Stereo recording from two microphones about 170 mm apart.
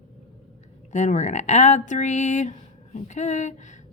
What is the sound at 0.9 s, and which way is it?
Speech, 45° left (ahead or behind).